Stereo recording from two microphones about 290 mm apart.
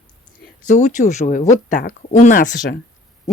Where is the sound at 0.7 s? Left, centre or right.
Left.